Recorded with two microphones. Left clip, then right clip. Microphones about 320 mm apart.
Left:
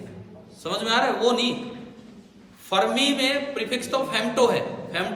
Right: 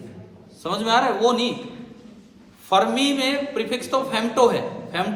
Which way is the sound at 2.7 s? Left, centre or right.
Centre.